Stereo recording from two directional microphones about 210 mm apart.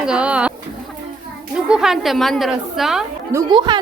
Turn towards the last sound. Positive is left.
turn(degrees=-20)  # may be behind; listen again after turning